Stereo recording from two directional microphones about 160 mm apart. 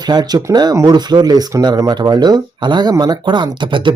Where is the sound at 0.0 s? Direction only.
25° right (ahead or behind).